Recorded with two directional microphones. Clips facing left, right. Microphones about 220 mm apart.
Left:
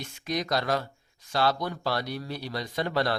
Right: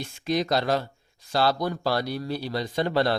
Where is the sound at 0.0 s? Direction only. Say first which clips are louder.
Right 5 dB; 30° right (ahead or behind).